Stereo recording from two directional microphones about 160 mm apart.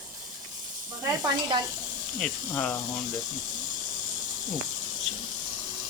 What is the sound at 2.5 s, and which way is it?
Speech, 15° left (ahead or behind).